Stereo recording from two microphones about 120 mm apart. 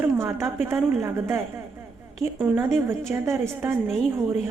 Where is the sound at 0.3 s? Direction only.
20° right (ahead or behind).